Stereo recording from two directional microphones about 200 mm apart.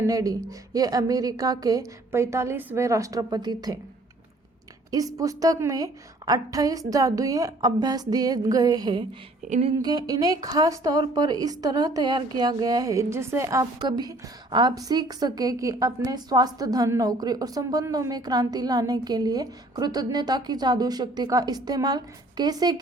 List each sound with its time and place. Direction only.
0.0 s a woman's voice: 15° right (ahead or behind)
4.9 s a woman's voice: 20° right (ahead or behind)
9.4 s speech: 35° right (ahead or behind)
9.7 s a woman's voice: 20° right (ahead or behind)